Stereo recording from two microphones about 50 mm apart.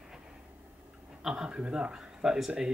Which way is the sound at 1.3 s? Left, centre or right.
Centre.